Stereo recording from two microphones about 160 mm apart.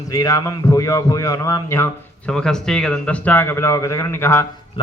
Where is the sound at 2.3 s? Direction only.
5° left (ahead or behind).